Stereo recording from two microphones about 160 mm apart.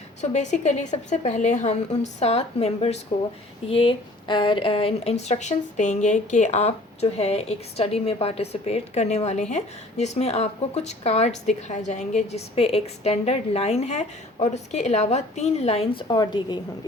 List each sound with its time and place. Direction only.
0.2 s a woman's voice: 45° left (ahead or behind)
16.0 s a woman's voice: 25° left (ahead or behind)